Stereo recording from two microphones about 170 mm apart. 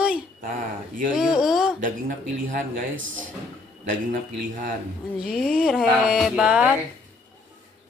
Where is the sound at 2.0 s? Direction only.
50° right (ahead or behind).